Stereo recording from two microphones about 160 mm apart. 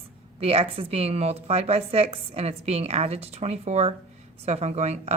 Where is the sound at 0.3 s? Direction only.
35° right (ahead or behind).